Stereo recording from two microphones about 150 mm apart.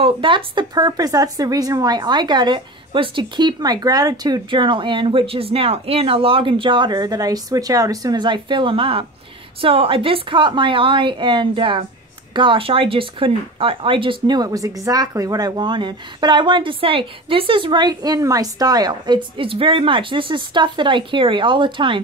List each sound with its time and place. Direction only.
0.0 s speech: 35° right (ahead or behind)